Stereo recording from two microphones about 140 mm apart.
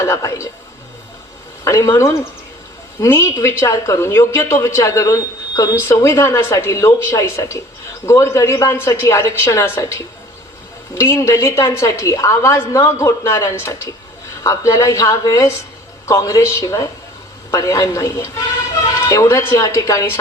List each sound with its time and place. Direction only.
0.0 s a woman's voice: 20° left (ahead or behind)
1.6 s a woman's voice: 20° left (ahead or behind)
11.0 s a woman's voice: 20° left (ahead or behind)